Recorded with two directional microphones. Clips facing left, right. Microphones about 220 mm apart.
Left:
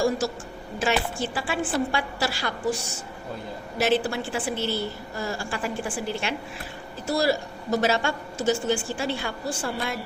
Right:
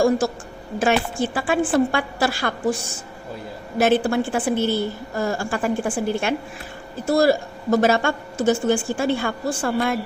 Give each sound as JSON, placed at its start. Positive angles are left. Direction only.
{"t": 0.2, "sound": "a woman's voice", "side_deg": -55}
{"t": 3.8, "sound": "a woman's voice", "side_deg": -50}